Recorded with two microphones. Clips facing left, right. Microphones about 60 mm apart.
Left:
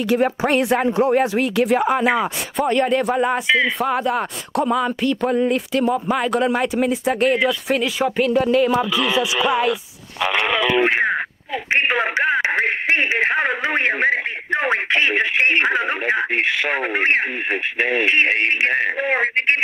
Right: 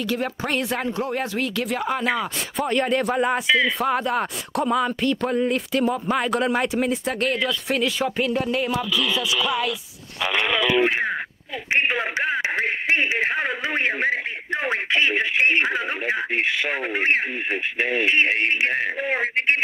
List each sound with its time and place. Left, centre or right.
0.0 s speech: centre
2.5 s speech: centre
7.2 s speech: centre
7.6 s speech: centre
8.7 s music: left
9.2 s music: left
10.2 s a man's voice: left